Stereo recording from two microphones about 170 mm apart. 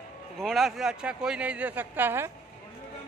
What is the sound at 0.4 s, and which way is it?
Speech, centre (ahead or behind).